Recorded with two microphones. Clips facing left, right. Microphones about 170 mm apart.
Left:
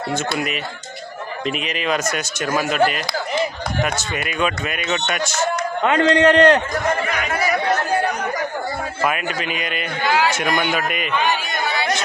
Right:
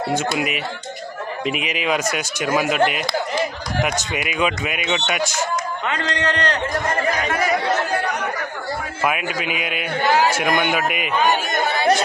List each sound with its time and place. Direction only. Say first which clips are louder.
0.1 s speech: even; 10° right (ahead or behind)
4.9 s speech: even; centre (ahead or behind)
5.1 s speech: left 1 dB; 15° right (ahead or behind)
5.8 s a man's voice: left 13 dB; 55° left (ahead or behind)
7.0 s speech: right 2 dB; 35° right (ahead or behind)
9.0 s speech: right 1 dB; 5° right (ahead or behind)
10.1 s a sound: right 1 dB; 40° right (ahead or behind)
10.3 s speech: right 1 dB; 5° right (ahead or behind)
11.1 s chatter: right 4 dB; 45° right (ahead or behind)